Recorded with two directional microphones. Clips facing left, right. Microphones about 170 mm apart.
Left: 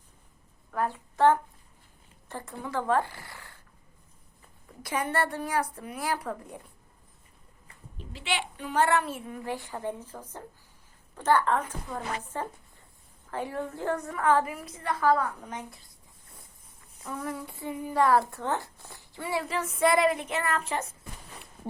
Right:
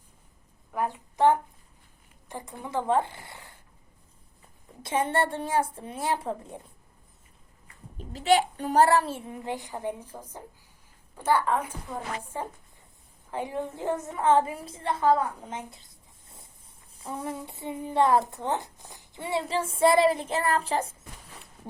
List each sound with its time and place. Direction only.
0.7 s a woman's voice: 15° right (ahead or behind)
4.8 s a woman's voice: 25° right (ahead or behind)
7.9 s a woman's voice: 40° right (ahead or behind); by 15.8 s 25° right (ahead or behind)
17.0 s a woman's voice: 30° right (ahead or behind)